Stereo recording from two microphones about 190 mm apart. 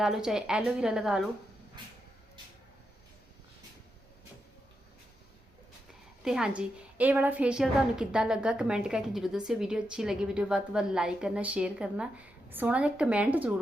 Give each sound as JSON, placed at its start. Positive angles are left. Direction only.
{"t": 0.0, "sound": "a woman's voice", "side_deg": 0}
{"t": 6.2, "sound": "a woman's voice", "side_deg": -5}